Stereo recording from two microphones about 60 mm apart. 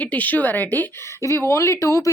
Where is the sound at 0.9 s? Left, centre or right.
Left.